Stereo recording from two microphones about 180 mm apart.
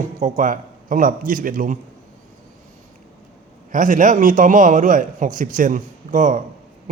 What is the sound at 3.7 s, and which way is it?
A man's voice, 45° right (ahead or behind).